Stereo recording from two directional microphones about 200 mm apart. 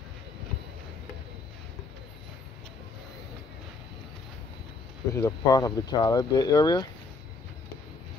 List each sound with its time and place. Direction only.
5.1 s speech: 15° left (ahead or behind)